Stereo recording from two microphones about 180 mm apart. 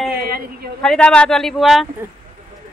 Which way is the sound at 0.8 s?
5° left (ahead or behind).